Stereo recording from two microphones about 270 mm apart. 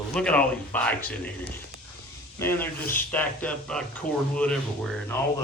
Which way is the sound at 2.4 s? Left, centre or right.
Centre.